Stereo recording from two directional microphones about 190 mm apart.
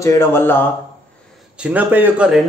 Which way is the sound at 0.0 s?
15° left (ahead or behind).